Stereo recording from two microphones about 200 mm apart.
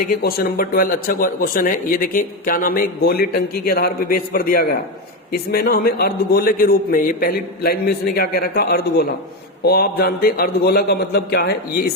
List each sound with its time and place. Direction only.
0.0 s speech: 50° left (ahead or behind)